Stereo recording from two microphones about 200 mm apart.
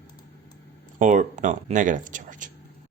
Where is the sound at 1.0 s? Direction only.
40° right (ahead or behind).